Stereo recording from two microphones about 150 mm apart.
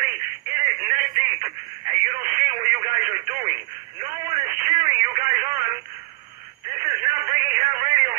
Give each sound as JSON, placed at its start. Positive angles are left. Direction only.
{"t": 0.0, "sound": "telephone", "side_deg": -10}
{"t": 1.9, "sound": "radio", "side_deg": -15}
{"t": 4.0, "sound": "telephone", "side_deg": -15}
{"t": 7.0, "sound": "a sound", "side_deg": -15}